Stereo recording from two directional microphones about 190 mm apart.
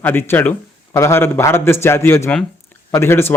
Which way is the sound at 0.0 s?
10° left (ahead or behind).